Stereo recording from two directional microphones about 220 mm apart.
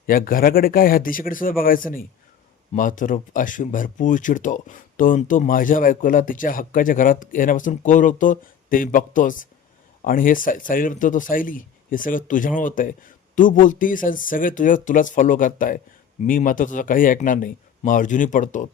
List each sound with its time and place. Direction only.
0.1 s speech: 40° left (ahead or behind)